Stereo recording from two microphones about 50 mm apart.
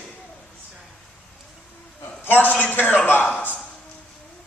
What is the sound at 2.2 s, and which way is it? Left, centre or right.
A man's voice, left.